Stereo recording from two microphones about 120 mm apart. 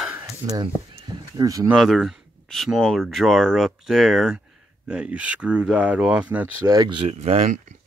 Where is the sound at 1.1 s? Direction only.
30° right (ahead or behind).